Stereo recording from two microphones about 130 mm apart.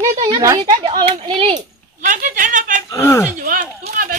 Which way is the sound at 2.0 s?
90° right.